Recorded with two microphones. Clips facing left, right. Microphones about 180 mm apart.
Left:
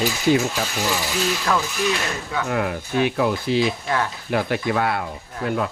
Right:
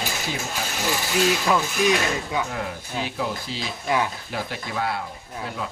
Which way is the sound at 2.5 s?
65° left (ahead or behind).